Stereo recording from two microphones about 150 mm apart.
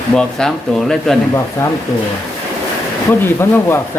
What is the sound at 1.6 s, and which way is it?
Speech, 20° left (ahead or behind).